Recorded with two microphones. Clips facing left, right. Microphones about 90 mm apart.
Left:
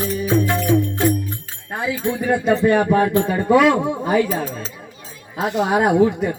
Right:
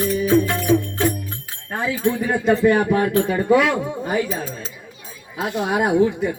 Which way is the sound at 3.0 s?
25° left (ahead or behind).